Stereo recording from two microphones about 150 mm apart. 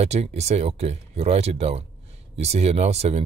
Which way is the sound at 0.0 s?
45° right (ahead or behind).